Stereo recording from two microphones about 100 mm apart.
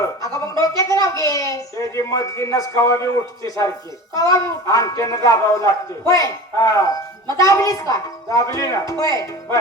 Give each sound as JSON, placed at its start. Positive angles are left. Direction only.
{"t": 0.2, "sound": "speech", "side_deg": 35}